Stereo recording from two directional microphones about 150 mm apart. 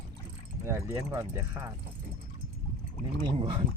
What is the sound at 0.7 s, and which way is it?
Speech, 20° right (ahead or behind).